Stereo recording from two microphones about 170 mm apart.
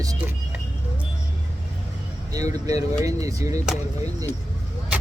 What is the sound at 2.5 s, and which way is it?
Speech, 20° right (ahead or behind).